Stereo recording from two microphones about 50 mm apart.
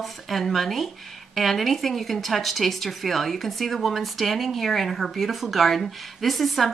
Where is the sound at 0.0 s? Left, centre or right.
Centre.